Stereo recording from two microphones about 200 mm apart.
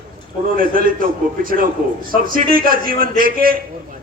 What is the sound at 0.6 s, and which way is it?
A man's voice, 45° right (ahead or behind).